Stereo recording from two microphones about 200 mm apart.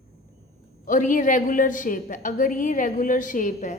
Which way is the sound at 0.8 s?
40° left (ahead or behind).